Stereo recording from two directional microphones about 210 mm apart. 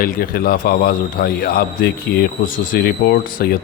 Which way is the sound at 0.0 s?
45° left (ahead or behind).